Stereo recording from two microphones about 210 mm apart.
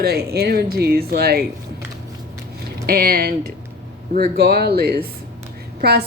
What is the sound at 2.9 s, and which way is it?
A woman's voice, 45° right (ahead or behind).